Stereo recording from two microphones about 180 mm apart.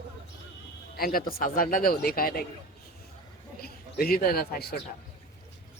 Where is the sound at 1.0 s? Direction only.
55° left (ahead or behind).